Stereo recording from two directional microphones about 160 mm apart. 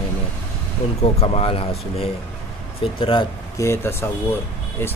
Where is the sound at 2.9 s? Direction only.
35° left (ahead or behind).